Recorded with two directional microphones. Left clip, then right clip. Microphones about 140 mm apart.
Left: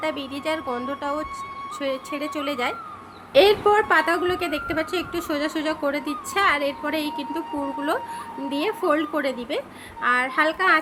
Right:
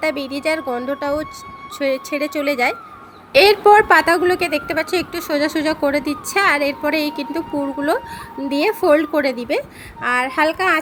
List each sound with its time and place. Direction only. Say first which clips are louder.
0.0 s a woman's voice: right 7 dB; 35° right (ahead or behind)
3.3 s a woman's voice: right 6 dB; 50° right (ahead or behind); by 10.8 s 35° right (ahead or behind)